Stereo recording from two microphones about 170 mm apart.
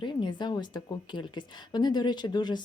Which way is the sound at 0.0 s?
25° left (ahead or behind).